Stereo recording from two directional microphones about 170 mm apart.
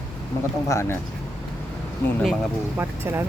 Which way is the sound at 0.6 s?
20° left (ahead or behind).